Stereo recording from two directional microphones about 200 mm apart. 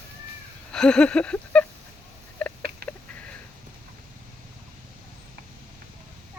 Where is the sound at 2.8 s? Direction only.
50° right (ahead or behind).